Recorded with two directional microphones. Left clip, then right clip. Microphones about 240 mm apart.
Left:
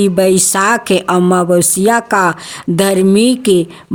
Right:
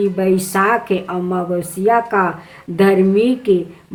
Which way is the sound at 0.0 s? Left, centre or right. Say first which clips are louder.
Left 6 dB; left.